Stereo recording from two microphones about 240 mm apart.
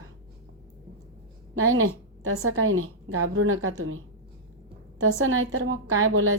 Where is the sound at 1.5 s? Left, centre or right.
Right.